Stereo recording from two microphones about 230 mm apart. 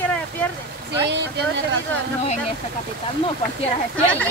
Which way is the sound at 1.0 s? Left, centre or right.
Right.